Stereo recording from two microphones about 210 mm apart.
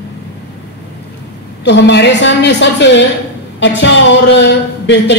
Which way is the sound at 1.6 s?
55° left (ahead or behind).